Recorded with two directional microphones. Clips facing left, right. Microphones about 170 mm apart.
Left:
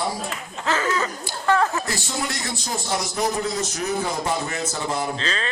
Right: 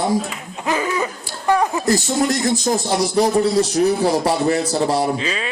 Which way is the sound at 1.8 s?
40° right (ahead or behind).